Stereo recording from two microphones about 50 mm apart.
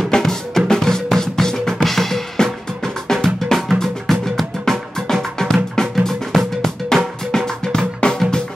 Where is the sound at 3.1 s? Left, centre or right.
Centre.